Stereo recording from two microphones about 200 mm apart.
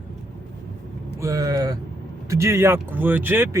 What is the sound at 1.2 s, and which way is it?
Speech, 15° right (ahead or behind).